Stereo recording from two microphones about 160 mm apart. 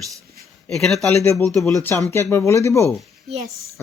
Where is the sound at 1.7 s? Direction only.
20° left (ahead or behind).